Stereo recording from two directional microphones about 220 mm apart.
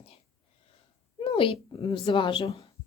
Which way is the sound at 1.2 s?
25° left (ahead or behind).